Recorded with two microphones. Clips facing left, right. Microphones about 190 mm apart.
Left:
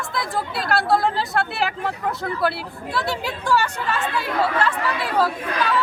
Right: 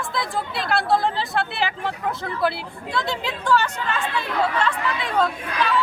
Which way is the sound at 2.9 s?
10° left (ahead or behind).